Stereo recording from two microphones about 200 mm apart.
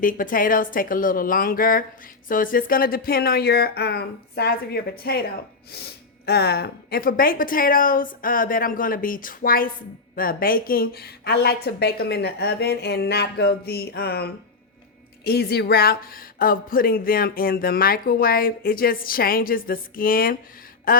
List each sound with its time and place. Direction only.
0.0 s speech: 45° left (ahead or behind)
6.2 s speech: 55° left (ahead or behind)